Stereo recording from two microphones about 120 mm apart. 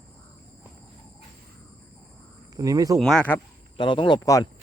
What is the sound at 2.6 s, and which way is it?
Speech, 30° right (ahead or behind).